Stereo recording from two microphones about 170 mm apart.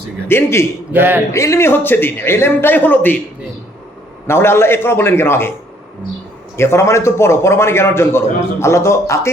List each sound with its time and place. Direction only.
0.3 s a man's voice: 15° left (ahead or behind)
0.9 s speech: 10° right (ahead or behind)
1.3 s a man's voice: 15° left (ahead or behind)
4.3 s a man's voice: 15° left (ahead or behind)
6.6 s a man's voice: 15° left (ahead or behind)